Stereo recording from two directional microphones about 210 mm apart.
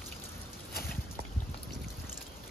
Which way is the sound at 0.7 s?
45° left (ahead or behind).